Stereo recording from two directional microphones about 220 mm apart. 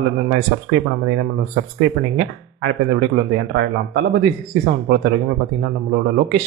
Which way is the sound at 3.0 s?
50° right (ahead or behind).